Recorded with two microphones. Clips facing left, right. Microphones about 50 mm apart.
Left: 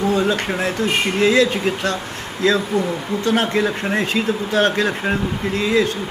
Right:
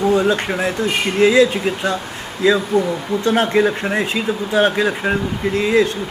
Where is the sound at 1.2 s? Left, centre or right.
Centre.